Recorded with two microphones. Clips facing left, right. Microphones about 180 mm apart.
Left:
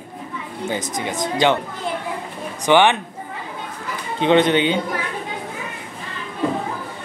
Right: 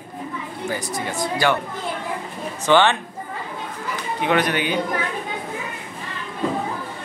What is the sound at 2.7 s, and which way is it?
Speech, 15° left (ahead or behind).